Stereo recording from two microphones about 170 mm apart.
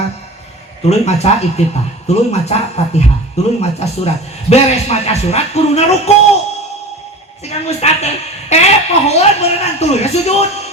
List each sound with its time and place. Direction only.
0.9 s speech: 40° left (ahead or behind)
7.4 s speech: 40° left (ahead or behind)